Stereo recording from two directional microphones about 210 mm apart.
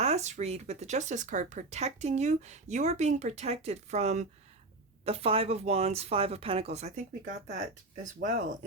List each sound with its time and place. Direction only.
0.0 s speech: 30° right (ahead or behind)